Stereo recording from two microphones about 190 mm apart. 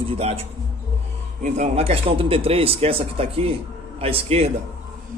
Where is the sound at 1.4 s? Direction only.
35° right (ahead or behind).